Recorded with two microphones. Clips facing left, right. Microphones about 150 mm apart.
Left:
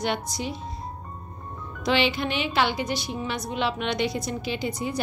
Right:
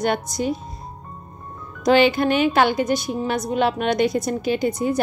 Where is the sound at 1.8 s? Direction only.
45° right (ahead or behind).